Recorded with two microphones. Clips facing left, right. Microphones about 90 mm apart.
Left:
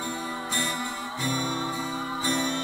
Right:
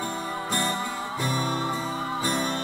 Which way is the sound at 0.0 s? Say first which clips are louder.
Right 2 dB; 40° right (ahead or behind).